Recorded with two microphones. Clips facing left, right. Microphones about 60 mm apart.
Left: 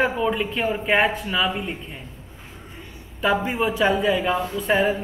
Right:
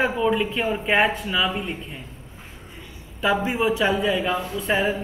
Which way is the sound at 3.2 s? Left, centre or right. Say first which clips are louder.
Even; centre.